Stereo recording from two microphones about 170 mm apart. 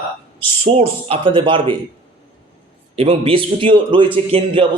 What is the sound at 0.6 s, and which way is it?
A man's voice, 35° right (ahead or behind).